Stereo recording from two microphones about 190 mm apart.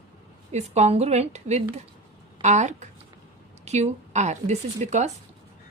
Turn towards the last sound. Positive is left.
turn(degrees=-35)  # may be behind; listen again after turning